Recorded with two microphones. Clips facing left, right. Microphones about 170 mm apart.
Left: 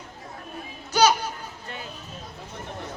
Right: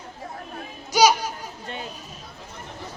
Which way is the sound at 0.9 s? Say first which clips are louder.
Right 2 dB; 10° right (ahead or behind).